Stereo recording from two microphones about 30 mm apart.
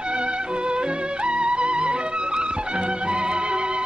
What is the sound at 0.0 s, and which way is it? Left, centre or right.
Music, right.